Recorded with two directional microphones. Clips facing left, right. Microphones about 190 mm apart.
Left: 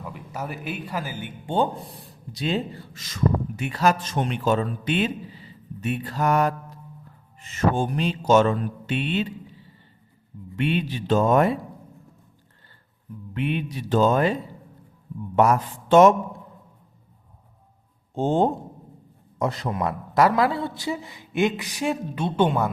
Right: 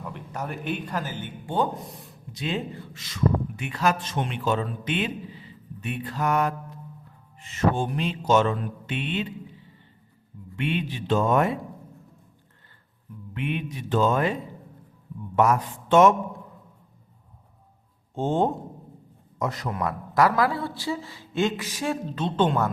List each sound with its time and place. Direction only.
0.0 s speech: 5° left (ahead or behind)
1.5 s speech: 30° left (ahead or behind)
7.4 s mantra: 45° left (ahead or behind)
10.6 s speech: 35° left (ahead or behind)
13.3 s speech: 35° left (ahead or behind)
15.4 s speech: 35° left (ahead or behind)
18.1 s a man's voice: 35° left (ahead or behind); by 22.7 s 10° left (ahead or behind)